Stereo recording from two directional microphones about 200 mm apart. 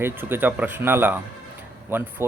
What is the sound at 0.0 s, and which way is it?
Speech, 10° right (ahead or behind).